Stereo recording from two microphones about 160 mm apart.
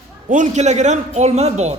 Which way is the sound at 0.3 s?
50° right (ahead or behind).